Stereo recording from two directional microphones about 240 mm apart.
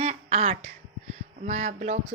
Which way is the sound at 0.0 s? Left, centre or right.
Right.